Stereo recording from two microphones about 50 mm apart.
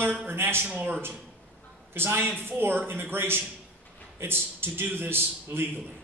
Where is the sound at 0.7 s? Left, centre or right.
Right.